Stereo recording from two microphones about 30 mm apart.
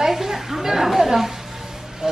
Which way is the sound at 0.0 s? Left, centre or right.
Centre.